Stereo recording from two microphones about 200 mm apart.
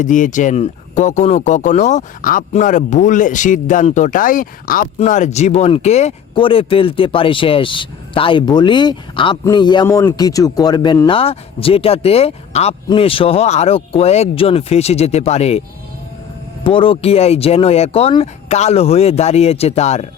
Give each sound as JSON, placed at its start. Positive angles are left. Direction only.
{"t": 0.0, "sound": "speech", "side_deg": 40}
{"t": 9.8, "sound": "speech", "side_deg": 10}
{"t": 16.6, "sound": "speech", "side_deg": 25}